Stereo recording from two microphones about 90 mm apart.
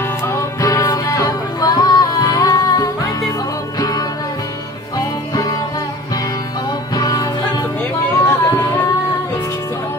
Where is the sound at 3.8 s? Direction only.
45° left (ahead or behind).